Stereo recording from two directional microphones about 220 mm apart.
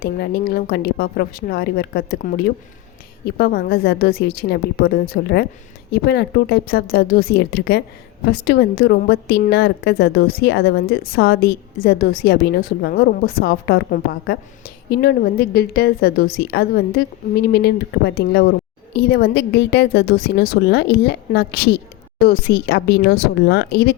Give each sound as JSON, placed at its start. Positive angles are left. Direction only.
{"t": 0.0, "sound": "a woman's voice", "side_deg": 45}